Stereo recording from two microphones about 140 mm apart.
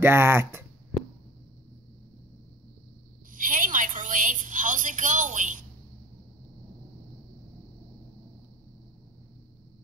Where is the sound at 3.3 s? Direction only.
70° right (ahead or behind).